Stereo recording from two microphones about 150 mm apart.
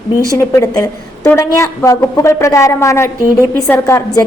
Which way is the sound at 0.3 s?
20° left (ahead or behind).